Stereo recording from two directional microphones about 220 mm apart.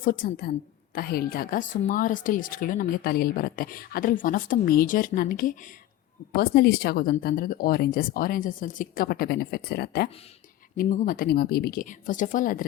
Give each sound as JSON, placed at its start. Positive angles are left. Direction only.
{"t": 0.0, "sound": "speech", "side_deg": 40}